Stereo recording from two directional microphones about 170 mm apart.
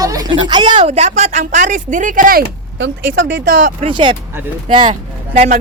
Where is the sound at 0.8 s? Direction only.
40° right (ahead or behind); by 3.2 s 75° right (ahead or behind).